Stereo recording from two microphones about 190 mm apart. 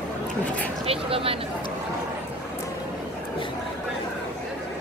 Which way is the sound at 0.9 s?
30° right (ahead or behind).